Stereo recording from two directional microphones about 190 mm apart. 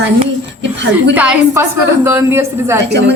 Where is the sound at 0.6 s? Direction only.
65° right (ahead or behind).